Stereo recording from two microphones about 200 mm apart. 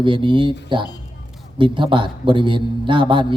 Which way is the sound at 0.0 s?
25° right (ahead or behind).